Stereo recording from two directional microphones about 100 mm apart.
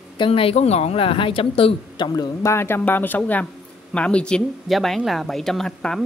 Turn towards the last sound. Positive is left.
turn(degrees=5)  # may be behind; listen again after turning